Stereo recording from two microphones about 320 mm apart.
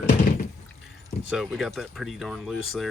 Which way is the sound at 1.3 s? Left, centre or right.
Centre.